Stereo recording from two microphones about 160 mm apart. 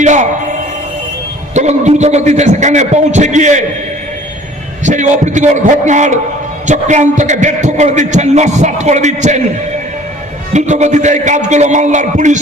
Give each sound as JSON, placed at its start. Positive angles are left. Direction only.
{"t": 0.0, "sound": "speech", "side_deg": -50}
{"t": 1.5, "sound": "a man's voice", "side_deg": -45}
{"t": 4.8, "sound": "a man's voice", "side_deg": -50}
{"t": 10.5, "sound": "a man's voice", "side_deg": -50}